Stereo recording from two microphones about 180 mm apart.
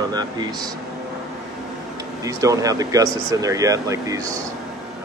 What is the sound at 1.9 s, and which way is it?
Speech, 20° right (ahead or behind).